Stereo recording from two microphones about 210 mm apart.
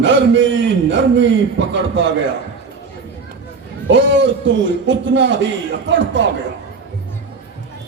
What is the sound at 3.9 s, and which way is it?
A man's voice, 60° right (ahead or behind).